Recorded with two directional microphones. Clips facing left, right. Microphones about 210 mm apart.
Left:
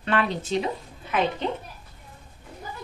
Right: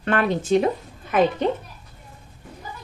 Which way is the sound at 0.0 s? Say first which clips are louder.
Right 4 dB; 50° right (ahead or behind).